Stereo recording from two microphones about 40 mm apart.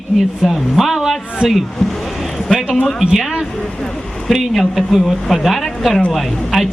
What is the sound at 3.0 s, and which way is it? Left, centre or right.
Speech, centre.